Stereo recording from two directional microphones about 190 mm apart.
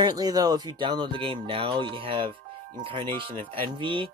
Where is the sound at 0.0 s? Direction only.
20° right (ahead or behind).